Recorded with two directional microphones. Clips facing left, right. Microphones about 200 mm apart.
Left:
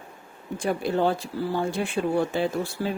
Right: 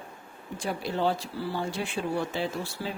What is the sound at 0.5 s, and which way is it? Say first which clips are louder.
Speech: left 6 dB; 55° left (ahead or behind).